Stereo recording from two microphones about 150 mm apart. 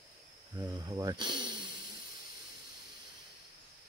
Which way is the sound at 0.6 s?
25° right (ahead or behind).